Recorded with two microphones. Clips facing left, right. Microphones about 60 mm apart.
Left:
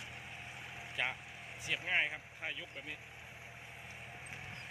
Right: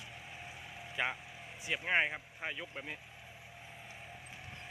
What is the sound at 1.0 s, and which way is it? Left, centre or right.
Speech, centre.